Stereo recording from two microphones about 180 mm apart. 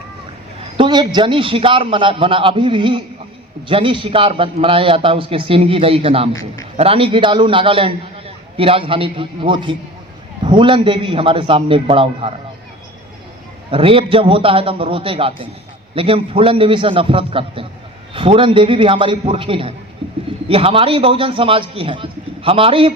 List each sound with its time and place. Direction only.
0.8 s a man's voice: 25° right (ahead or behind)
13.7 s a man's voice: 30° right (ahead or behind)
20.0 s pigeon: 30° right (ahead or behind)
20.5 s a man's voice: 30° right (ahead or behind)